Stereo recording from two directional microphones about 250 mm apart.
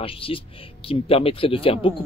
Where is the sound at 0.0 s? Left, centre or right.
Left.